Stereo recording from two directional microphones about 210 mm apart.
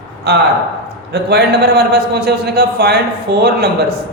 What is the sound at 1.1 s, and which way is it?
A man's voice, 50° right (ahead or behind).